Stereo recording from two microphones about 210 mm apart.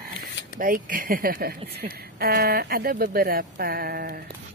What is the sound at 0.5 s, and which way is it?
Speech, 40° right (ahead or behind).